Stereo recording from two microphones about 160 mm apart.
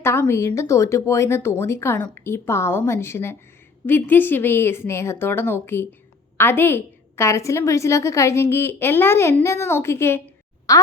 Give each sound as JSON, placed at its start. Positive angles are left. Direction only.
{"t": 0.0, "sound": "a woman's voice", "side_deg": 15}